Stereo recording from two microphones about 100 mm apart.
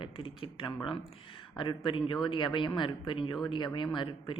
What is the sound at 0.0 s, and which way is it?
Speech, 55° left (ahead or behind).